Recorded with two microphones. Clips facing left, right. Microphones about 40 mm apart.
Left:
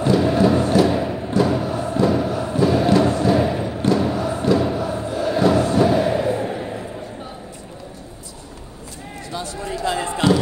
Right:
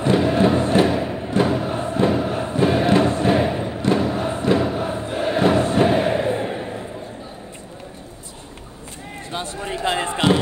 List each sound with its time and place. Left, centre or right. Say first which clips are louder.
0.0 s music: left 1 dB; right
1.3 s a sound: even; right
3.8 s crowd: left 1 dB; right
9.3 s basketball bounce: even; right